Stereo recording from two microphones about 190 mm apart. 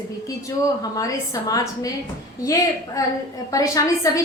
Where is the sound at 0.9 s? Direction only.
20° left (ahead or behind).